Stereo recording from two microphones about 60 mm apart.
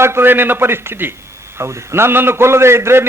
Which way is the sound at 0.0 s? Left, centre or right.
Right.